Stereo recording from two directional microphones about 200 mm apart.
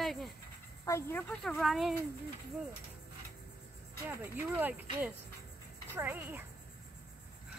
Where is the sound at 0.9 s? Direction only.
10° left (ahead or behind).